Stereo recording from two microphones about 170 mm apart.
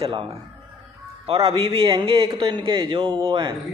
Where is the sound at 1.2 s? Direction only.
30° right (ahead or behind).